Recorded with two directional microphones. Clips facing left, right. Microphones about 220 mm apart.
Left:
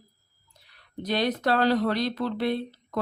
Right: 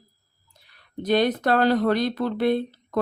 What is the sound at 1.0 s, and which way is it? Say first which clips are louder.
Speech: right 5 dB; 50° right (ahead or behind).